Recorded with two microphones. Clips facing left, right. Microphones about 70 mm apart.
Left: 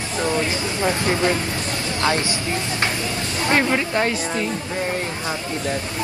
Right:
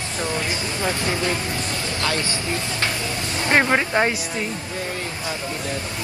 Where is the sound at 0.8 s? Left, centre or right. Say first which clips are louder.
Left 4 dB; left.